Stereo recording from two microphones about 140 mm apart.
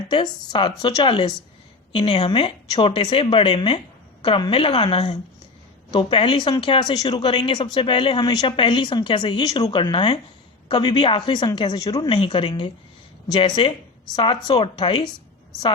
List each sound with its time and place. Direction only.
0.1 s speech: 35° left (ahead or behind)